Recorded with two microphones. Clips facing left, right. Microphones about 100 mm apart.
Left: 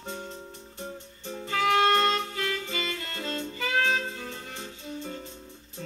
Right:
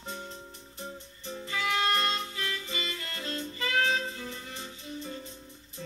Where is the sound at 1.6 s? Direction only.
50° left (ahead or behind).